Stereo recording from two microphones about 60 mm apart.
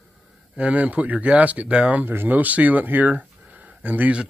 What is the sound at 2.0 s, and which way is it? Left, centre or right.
Speech, right.